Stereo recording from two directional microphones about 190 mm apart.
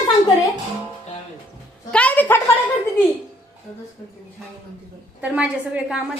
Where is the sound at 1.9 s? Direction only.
10° left (ahead or behind).